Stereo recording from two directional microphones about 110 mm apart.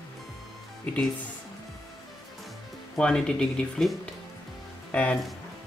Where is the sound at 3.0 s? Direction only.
5° left (ahead or behind).